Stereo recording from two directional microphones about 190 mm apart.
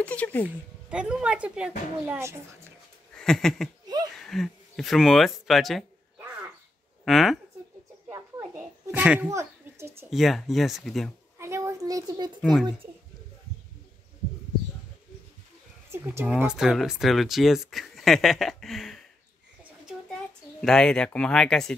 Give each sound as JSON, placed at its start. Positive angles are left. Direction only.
{"t": 0.0, "sound": "speech", "side_deg": 10}
{"t": 0.5, "sound": "speech", "side_deg": -5}
{"t": 3.2, "sound": "a sound", "side_deg": 5}
{"t": 3.8, "sound": "a sound", "side_deg": -20}
{"t": 4.1, "sound": "speech", "side_deg": 0}
{"t": 7.1, "sound": "speech", "side_deg": 0}
{"t": 8.1, "sound": "children playing", "side_deg": -15}
{"t": 10.0, "sound": "speech", "side_deg": 0}
{"t": 11.3, "sound": "a sound", "side_deg": -15}
{"t": 12.4, "sound": "speech", "side_deg": 0}
{"t": 16.3, "sound": "speech", "side_deg": -5}
{"t": 20.6, "sound": "speech", "side_deg": 5}